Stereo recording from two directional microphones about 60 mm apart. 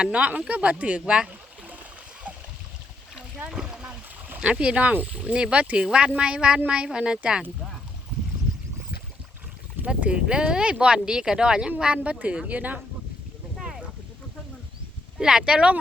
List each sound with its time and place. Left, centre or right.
0.0 s speech: right
2.3 s a sound: right
3.5 s rowboat: centre
4.4 s speech: right
9.8 s speech: centre
13.6 s boat: centre
15.2 s speech: centre